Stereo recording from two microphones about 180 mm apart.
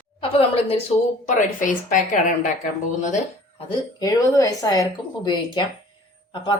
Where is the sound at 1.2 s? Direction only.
45° left (ahead or behind).